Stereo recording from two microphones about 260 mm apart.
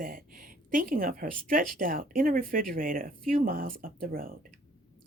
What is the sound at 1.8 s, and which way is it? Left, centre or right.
Speech, right.